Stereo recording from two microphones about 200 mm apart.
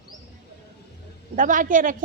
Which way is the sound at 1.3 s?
40° right (ahead or behind).